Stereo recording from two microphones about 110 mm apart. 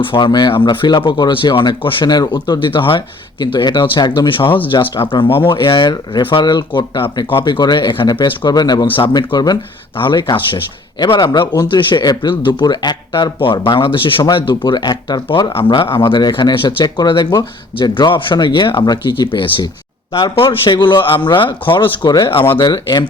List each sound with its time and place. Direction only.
0.0 s speech: 45° left (ahead or behind)
22.5 s speech: 40° left (ahead or behind)